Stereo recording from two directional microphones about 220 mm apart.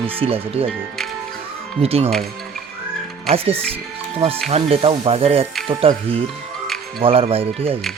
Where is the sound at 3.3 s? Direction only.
25° right (ahead or behind).